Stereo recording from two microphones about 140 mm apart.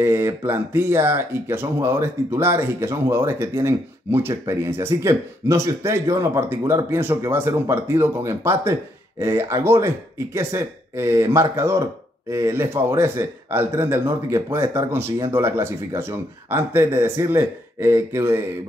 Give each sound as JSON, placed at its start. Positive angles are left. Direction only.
{"t": 0.0, "sound": "speech", "side_deg": -20}